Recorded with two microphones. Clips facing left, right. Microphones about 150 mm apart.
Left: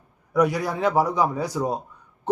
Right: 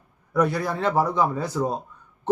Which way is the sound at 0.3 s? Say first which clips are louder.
Left 1 dB; 10° left (ahead or behind).